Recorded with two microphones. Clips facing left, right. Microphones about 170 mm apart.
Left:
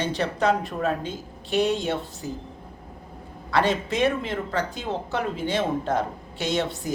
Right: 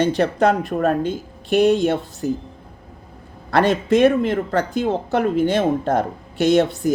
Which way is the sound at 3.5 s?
55° right (ahead or behind).